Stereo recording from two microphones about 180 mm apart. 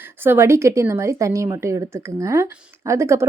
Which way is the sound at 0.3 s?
15° right (ahead or behind).